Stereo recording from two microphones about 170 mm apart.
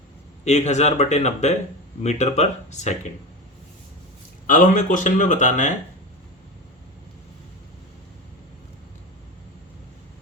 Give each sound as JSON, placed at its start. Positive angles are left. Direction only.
{"t": 0.4, "sound": "speech", "side_deg": 40}
{"t": 4.4, "sound": "speech", "side_deg": 50}